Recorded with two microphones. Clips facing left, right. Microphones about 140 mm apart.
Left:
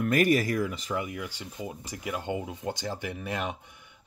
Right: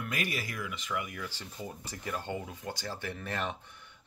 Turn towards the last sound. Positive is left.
turn(degrees=15)  # may be behind; listen again after turning